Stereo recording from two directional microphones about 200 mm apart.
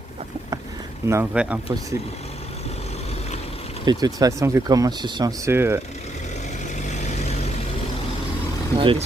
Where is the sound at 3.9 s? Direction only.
20° right (ahead or behind).